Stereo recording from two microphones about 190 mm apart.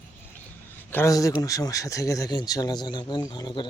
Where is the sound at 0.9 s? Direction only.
15° left (ahead or behind).